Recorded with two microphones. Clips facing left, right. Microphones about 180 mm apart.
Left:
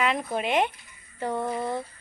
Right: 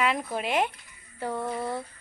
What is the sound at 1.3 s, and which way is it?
Speech, 15° left (ahead or behind).